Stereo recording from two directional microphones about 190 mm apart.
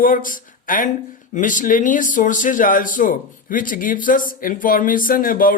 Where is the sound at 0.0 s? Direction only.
45° left (ahead or behind).